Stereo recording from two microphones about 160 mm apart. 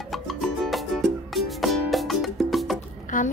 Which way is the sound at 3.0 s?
55° left (ahead or behind).